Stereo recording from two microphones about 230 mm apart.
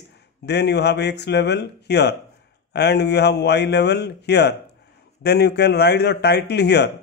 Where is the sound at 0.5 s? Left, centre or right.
Left.